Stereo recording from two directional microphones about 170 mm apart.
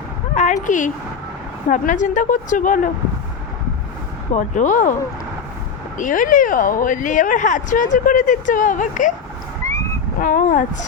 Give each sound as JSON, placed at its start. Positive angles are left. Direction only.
{"t": 0.3, "sound": "speech", "side_deg": 45}
{"t": 4.4, "sound": "speech", "side_deg": 50}
{"t": 6.0, "sound": "speech", "side_deg": 50}
{"t": 10.2, "sound": "speech", "side_deg": 50}